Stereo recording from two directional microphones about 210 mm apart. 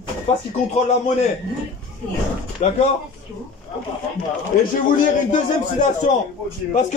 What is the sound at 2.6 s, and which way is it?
Speech, 35° left (ahead or behind).